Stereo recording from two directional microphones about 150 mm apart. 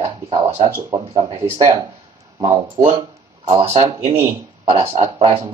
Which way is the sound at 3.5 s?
45° right (ahead or behind).